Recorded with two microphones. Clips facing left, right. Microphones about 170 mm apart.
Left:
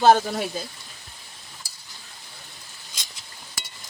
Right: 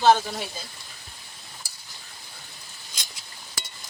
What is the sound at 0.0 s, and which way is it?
Speech, 50° left (ahead or behind).